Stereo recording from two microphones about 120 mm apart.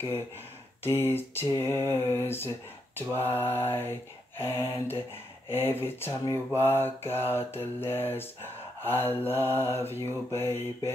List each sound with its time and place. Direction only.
1.1 s mantra: 20° left (ahead or behind)